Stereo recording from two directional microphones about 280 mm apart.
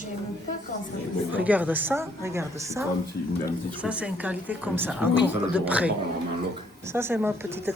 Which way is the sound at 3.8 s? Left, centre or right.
Centre.